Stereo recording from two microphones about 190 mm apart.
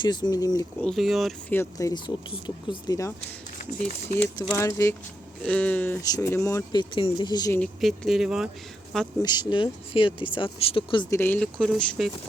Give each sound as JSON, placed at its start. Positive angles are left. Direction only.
{"t": 0.0, "sound": "speech", "side_deg": 20}
{"t": 0.8, "sound": "speech", "side_deg": 0}
{"t": 1.5, "sound": "speech", "side_deg": 20}
{"t": 4.4, "sound": "speech", "side_deg": 15}
{"t": 7.6, "sound": "speech", "side_deg": 0}
{"t": 9.2, "sound": "speech", "side_deg": 20}
{"t": 11.2, "sound": "speech", "side_deg": 5}